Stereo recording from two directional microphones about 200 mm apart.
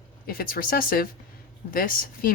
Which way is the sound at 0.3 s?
50° left (ahead or behind).